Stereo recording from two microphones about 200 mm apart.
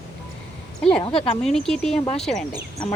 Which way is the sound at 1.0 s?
30° left (ahead or behind).